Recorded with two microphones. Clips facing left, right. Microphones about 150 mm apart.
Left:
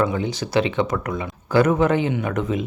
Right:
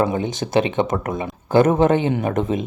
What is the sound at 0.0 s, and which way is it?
Speech, 20° right (ahead or behind).